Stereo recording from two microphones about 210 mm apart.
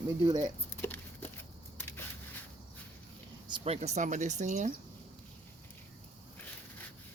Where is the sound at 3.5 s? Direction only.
25° right (ahead or behind).